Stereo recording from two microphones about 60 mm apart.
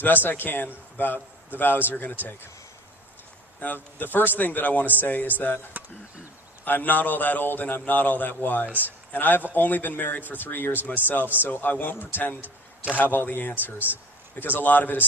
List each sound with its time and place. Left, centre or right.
0.0 s a man's voice: left
3.9 s a man's voice: left
5.7 s speech: right
6.7 s a man's voice: left
12.4 s speech: right
13.0 s a man's voice: left
13.7 s speech: right
14.3 s a man's voice: left